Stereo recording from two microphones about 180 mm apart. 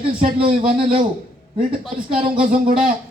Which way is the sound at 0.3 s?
30° right (ahead or behind).